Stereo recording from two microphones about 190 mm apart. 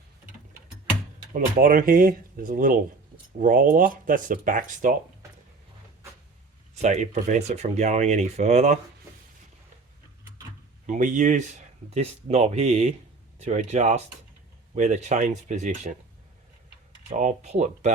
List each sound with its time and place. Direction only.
1.3 s speech: 45° right (ahead or behind)
6.8 s speech: 40° right (ahead or behind)
10.8 s speech: 40° right (ahead or behind)
17.1 s speech: 40° right (ahead or behind)